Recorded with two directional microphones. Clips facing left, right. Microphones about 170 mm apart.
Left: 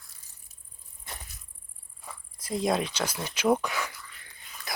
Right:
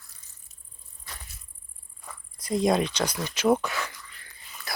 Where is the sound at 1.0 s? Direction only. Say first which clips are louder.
Left 2 dB; 20° left (ahead or behind).